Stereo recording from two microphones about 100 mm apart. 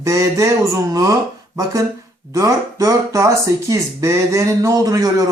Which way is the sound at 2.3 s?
35° right (ahead or behind).